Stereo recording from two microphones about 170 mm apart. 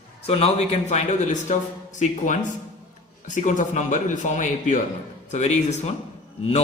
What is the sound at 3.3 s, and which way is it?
A man's voice, 50° left (ahead or behind).